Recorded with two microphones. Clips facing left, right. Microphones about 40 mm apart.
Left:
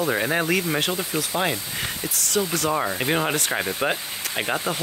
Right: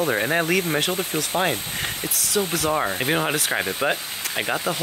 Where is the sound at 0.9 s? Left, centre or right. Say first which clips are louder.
Right 1 dB; right.